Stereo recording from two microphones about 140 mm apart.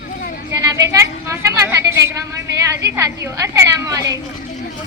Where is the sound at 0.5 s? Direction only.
25° right (ahead or behind).